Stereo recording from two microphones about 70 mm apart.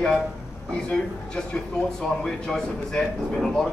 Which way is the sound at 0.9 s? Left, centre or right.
Centre.